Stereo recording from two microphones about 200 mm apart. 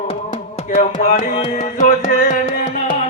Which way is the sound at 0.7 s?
40° left (ahead or behind).